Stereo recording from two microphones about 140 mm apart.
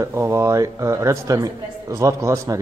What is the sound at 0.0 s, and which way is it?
Speech, 20° right (ahead or behind).